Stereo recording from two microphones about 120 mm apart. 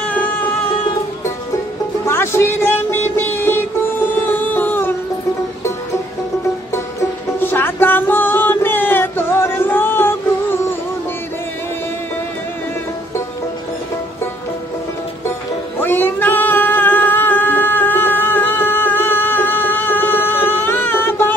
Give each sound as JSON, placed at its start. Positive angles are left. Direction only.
{"t": 0.0, "sound": "music", "side_deg": 15}
{"t": 2.0, "sound": "music", "side_deg": 20}
{"t": 6.7, "sound": "music", "side_deg": 20}
{"t": 15.8, "sound": "singing", "side_deg": 15}